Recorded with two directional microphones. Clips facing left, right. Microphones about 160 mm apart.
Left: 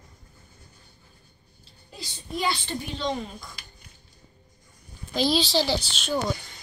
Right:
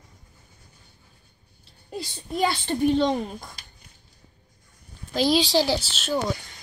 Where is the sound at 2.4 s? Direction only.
50° right (ahead or behind).